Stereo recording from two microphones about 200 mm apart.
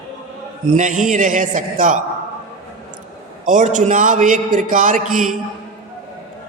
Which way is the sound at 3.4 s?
40° right (ahead or behind).